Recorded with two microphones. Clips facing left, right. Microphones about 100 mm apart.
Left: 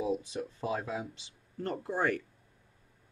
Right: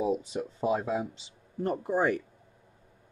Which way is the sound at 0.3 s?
15° right (ahead or behind).